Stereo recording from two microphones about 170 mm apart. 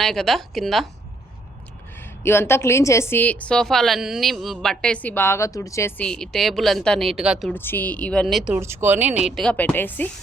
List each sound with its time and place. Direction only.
0.0 s speech: 5° left (ahead or behind)
2.0 s a woman's voice: 15° left (ahead or behind)
6.1 s speech: 5° left (ahead or behind)
7.5 s a woman's voice: 10° left (ahead or behind)
8.5 s speech: 15° right (ahead or behind); by 10.1 s 10° left (ahead or behind)